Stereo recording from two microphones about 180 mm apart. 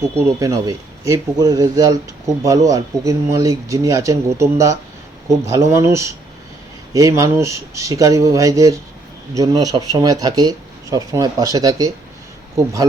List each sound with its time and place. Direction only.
0.3 s speech: 20° right (ahead or behind)